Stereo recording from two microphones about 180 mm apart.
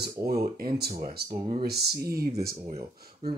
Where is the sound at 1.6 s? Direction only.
60° right (ahead or behind).